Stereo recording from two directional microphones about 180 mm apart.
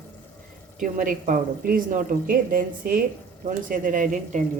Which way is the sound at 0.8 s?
50° right (ahead or behind).